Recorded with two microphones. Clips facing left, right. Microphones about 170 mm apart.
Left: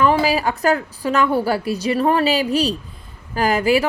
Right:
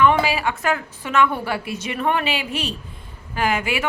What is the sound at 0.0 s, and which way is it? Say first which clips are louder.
A woman's voice: left 1 dB; 35° left (ahead or behind).